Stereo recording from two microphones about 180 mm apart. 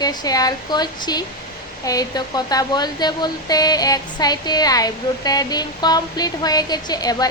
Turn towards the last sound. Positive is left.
turn(degrees=20)  # may be behind; listen again after turning